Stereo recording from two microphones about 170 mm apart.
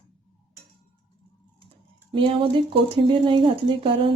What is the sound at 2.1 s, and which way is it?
Speech, 30° right (ahead or behind).